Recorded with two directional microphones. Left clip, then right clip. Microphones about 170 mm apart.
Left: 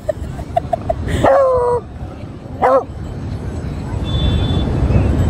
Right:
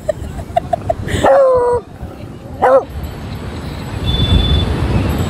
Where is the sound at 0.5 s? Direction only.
15° left (ahead or behind).